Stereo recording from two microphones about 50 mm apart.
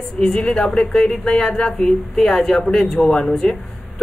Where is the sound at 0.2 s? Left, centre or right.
Centre.